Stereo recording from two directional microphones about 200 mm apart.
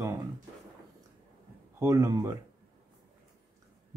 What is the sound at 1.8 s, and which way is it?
Speech, 15° right (ahead or behind).